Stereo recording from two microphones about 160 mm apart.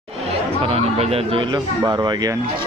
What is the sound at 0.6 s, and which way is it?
Speech, 40° right (ahead or behind).